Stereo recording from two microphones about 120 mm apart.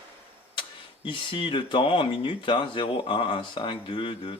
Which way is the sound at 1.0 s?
45° left (ahead or behind).